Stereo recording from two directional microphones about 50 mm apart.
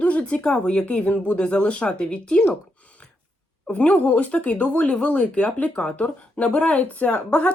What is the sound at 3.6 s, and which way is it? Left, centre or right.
A woman's voice, left.